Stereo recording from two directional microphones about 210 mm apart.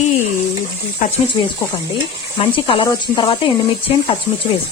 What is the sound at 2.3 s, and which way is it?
A woman's voice, 25° left (ahead or behind).